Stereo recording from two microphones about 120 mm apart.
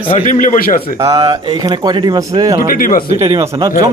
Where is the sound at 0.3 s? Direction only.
90° left.